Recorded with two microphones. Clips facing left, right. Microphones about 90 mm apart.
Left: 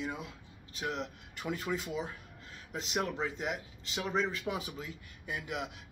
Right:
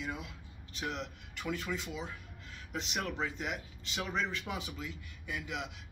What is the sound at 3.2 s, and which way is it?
Speech, 35° left (ahead or behind).